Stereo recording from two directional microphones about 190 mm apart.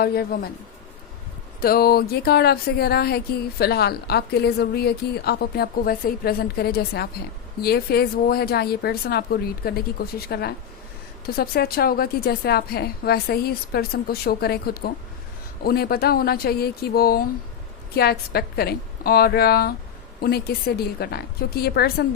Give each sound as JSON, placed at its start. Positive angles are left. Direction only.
{"t": 0.0, "sound": "speech", "side_deg": 55}
{"t": 1.6, "sound": "speech", "side_deg": 50}